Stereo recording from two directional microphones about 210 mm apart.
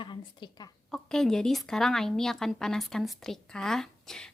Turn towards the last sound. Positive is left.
turn(degrees=0)  # may be behind; listen again after turning